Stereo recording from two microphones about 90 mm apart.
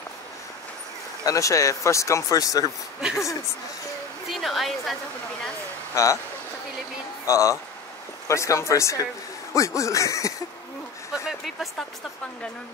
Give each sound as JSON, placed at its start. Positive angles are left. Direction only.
{"t": 1.2, "sound": "speech", "side_deg": 35}
{"t": 4.3, "sound": "a woman's voice", "side_deg": 0}
{"t": 5.9, "sound": "speech", "side_deg": 35}
{"t": 7.2, "sound": "speech", "side_deg": 35}
{"t": 11.2, "sound": "a sound", "side_deg": 0}